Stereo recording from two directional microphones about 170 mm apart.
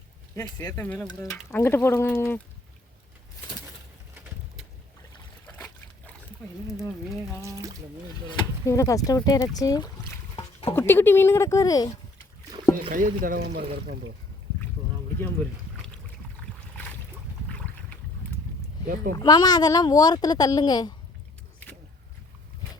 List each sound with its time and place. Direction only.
0.6 s speech: 10° left (ahead or behind)
8.3 s speech: 20° left (ahead or behind)
10.3 s a sound: 35° left (ahead or behind)
10.8 s speech: 15° left (ahead or behind)
12.9 s speech: 55° right (ahead or behind); by 13.7 s 75° right (ahead or behind)
19.1 s speech: 25° left (ahead or behind)